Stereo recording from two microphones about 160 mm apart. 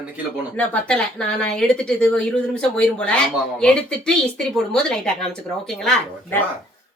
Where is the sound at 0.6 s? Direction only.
5° left (ahead or behind).